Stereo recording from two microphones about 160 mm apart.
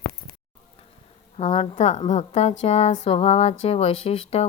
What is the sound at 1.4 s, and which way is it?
Mantra, 40° left (ahead or behind).